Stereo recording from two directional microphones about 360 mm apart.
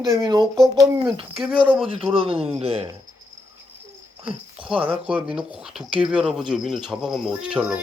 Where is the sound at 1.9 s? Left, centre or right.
Centre.